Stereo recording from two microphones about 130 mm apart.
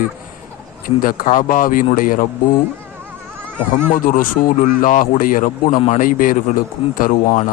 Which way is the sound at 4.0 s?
90° left.